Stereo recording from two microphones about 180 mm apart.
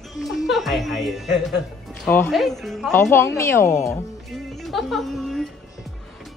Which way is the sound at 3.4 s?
15° left (ahead or behind).